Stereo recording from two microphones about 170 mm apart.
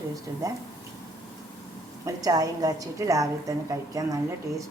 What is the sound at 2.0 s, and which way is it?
A woman's voice, 20° right (ahead or behind).